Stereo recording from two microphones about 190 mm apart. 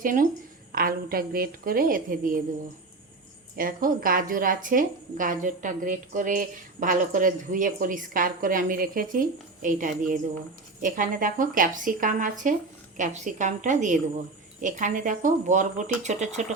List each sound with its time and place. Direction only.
0.0 s a woman's voice: 45° right (ahead or behind)
3.5 s a woman's voice: 50° right (ahead or behind)